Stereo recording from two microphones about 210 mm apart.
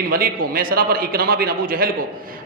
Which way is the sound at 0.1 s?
45° right (ahead or behind).